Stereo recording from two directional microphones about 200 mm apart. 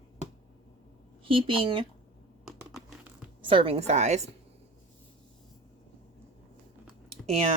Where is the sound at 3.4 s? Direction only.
25° right (ahead or behind).